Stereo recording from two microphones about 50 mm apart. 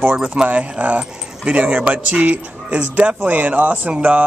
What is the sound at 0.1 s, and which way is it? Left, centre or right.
A man's voice, right.